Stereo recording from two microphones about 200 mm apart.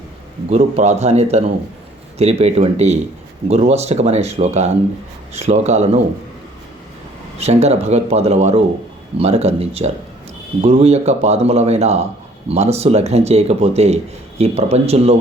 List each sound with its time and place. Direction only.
0.5 s speech: 35° right (ahead or behind)
7.3 s speech: 30° right (ahead or behind)